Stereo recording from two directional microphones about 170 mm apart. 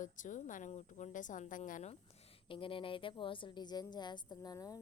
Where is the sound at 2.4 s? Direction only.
30° left (ahead or behind).